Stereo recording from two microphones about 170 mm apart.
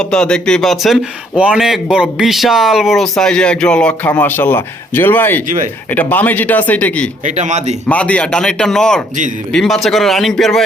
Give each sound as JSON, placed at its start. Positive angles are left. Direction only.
{"t": 0.0, "sound": "speech", "side_deg": 5}
{"t": 7.3, "sound": "a man's voice", "side_deg": -45}
{"t": 7.9, "sound": "speech", "side_deg": 10}